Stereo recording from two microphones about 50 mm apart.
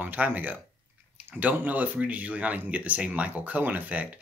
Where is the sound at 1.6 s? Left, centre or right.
Right.